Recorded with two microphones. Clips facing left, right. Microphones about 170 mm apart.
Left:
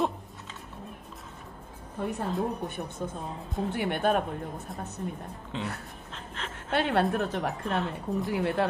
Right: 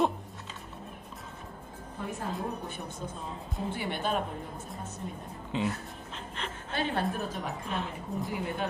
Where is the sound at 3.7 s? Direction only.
55° left (ahead or behind).